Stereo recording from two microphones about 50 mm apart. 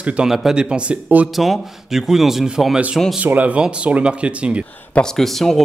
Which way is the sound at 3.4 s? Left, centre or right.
Right.